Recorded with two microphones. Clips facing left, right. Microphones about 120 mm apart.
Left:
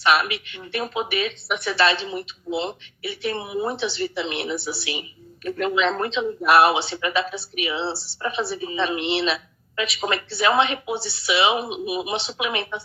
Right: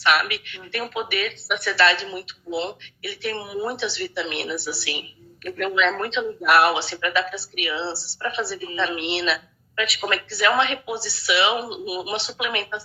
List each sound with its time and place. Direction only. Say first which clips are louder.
0.0 s speech: left 2 dB; 20° left (ahead or behind)